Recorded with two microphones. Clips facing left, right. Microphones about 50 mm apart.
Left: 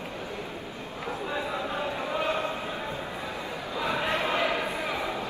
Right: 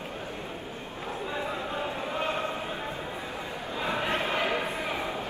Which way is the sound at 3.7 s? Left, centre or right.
Right.